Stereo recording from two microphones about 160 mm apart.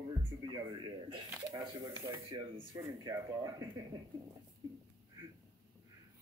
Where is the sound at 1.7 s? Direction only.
20° right (ahead or behind).